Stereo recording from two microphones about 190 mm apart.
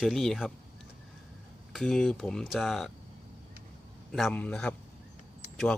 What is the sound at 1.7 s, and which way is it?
Speech, 5° left (ahead or behind).